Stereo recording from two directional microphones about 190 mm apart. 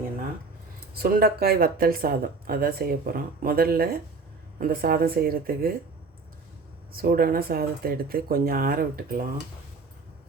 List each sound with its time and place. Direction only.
0.9 s speech: 50° right (ahead or behind)
6.9 s speech: 50° right (ahead or behind)